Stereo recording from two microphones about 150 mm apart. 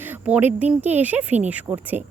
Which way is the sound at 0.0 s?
10° right (ahead or behind).